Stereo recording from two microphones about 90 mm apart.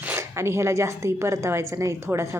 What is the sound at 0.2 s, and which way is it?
A woman's voice, 30° right (ahead or behind).